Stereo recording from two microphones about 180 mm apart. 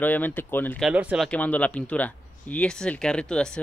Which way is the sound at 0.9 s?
5° right (ahead or behind).